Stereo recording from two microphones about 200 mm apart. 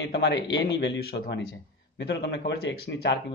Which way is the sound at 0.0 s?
65° left (ahead or behind).